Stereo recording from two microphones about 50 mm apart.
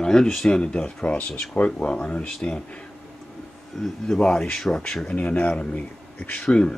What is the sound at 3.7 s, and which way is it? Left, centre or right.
Speech, centre.